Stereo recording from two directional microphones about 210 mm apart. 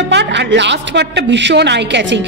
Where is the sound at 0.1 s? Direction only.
55° right (ahead or behind).